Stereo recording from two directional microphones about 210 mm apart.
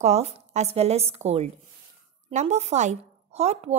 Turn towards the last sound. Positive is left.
turn(degrees=-30)  # may be behind; listen again after turning